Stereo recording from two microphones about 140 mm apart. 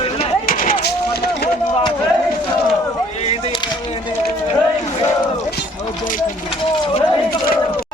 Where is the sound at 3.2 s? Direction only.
45° left (ahead or behind).